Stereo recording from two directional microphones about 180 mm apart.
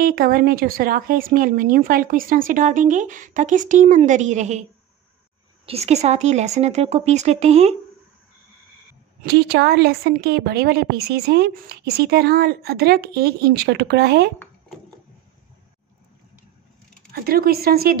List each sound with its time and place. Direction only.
0.0 s speech: 55° right (ahead or behind)
5.7 s speech: 35° right (ahead or behind)
9.2 s a woman's voice: 65° right (ahead or behind)
17.1 s a woman's voice: 55° right (ahead or behind)